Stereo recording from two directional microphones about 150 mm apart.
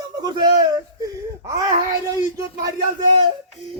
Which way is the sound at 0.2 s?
30° right (ahead or behind).